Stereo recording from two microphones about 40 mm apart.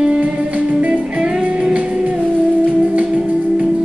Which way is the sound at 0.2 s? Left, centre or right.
Right.